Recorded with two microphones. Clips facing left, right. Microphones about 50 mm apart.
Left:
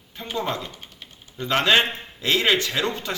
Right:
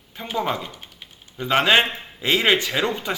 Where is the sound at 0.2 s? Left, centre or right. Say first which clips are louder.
Right 2 dB; centre.